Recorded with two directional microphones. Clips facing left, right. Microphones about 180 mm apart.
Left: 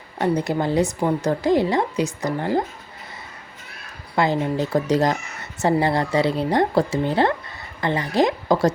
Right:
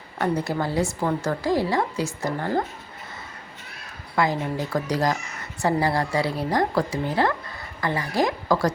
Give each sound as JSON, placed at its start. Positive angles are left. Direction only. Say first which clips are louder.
{"t": 0.2, "sound": "a woman's voice", "louder": "left 3 dB", "side_deg": 20}
{"t": 4.1, "sound": "a woman's voice", "louder": "left 3 dB", "side_deg": 25}